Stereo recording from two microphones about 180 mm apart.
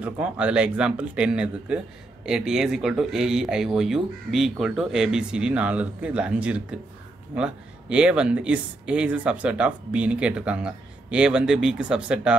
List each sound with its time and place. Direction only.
0.0 s speech: 5° right (ahead or behind)